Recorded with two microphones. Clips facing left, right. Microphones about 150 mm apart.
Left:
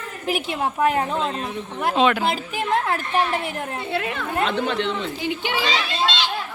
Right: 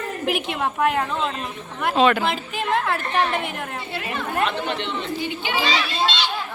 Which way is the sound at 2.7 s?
40° left (ahead or behind).